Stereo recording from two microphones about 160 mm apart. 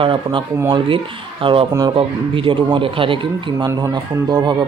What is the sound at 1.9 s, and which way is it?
Speech, 35° right (ahead or behind).